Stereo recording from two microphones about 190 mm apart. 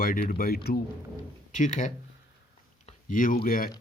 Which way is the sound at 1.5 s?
40° left (ahead or behind).